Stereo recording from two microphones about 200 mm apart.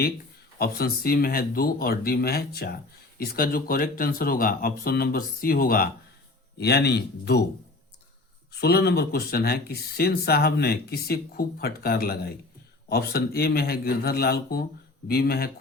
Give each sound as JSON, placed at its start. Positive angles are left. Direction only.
{"t": 0.6, "sound": "speech", "side_deg": 50}
{"t": 8.6, "sound": "speech", "side_deg": 50}